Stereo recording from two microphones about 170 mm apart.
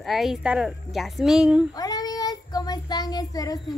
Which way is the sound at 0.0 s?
Centre (ahead or behind).